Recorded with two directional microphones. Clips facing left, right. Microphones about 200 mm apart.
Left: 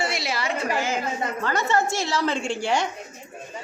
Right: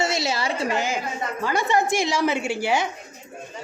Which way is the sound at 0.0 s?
25° right (ahead or behind).